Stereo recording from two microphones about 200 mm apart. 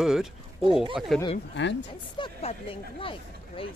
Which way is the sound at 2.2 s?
30° left (ahead or behind).